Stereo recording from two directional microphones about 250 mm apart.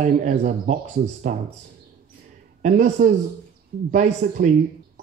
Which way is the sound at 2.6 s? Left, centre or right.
Right.